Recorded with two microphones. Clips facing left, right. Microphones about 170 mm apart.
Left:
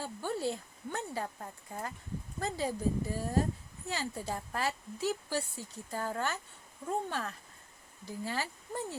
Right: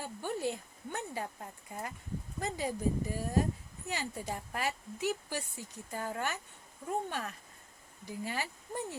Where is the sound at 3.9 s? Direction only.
15° right (ahead or behind).